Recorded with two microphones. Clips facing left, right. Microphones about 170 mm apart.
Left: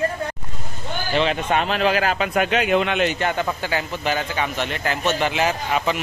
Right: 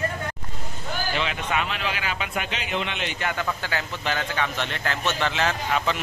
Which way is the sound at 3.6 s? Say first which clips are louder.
Left 5 dB; 15° left (ahead or behind).